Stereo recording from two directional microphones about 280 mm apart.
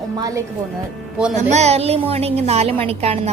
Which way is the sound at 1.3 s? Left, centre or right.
Right.